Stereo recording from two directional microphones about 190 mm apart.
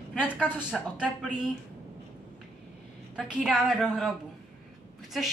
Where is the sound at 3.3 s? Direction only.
5° right (ahead or behind).